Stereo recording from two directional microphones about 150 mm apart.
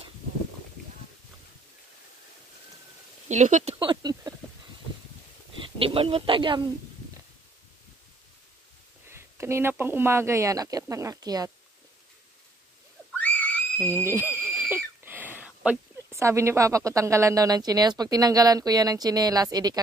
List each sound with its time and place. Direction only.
3.3 s speech: 55° right (ahead or behind)
3.8 s a sound: 30° right (ahead or behind)
5.8 s speech: 35° right (ahead or behind)
9.1 s speech: 15° right (ahead or behind)
13.2 s a sound: 10° left (ahead or behind)
14.0 s speech: 15° right (ahead or behind)